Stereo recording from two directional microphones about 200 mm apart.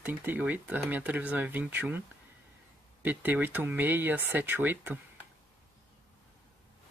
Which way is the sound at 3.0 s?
10° right (ahead or behind).